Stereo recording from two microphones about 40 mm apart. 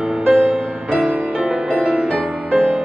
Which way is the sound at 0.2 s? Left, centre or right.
Right.